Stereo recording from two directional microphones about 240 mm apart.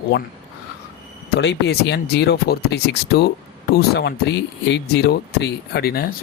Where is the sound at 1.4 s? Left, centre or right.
Left.